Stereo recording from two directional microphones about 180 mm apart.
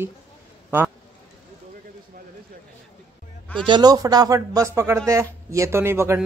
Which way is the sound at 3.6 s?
25° right (ahead or behind).